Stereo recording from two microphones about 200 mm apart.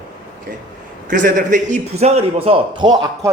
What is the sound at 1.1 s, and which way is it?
A man's voice, 40° right (ahead or behind).